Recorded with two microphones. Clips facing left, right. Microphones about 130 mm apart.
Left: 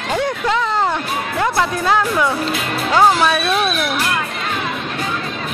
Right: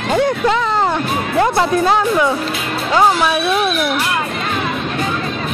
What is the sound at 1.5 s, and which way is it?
Speech, 25° right (ahead or behind).